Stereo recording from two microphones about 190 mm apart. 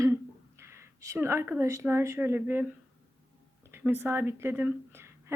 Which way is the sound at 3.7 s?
10° right (ahead or behind).